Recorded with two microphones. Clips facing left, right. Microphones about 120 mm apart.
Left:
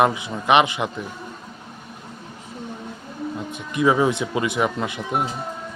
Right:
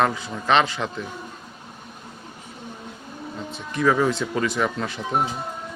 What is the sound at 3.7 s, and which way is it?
Speech, 15° left (ahead or behind).